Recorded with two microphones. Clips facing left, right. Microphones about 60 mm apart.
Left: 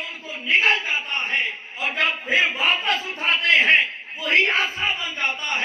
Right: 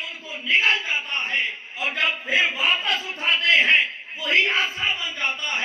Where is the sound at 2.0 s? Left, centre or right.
Left.